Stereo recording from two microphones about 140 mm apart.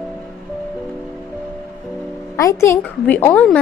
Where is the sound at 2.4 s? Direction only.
20° left (ahead or behind).